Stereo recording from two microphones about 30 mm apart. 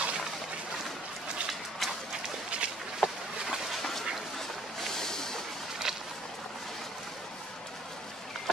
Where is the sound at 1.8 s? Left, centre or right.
Centre.